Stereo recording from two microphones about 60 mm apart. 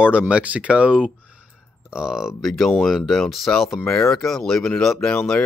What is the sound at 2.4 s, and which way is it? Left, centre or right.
Speech, centre.